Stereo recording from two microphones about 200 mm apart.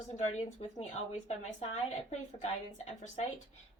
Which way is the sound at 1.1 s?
35° left (ahead or behind).